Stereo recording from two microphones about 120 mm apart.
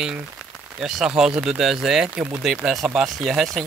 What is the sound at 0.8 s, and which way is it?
Speech, 5° right (ahead or behind).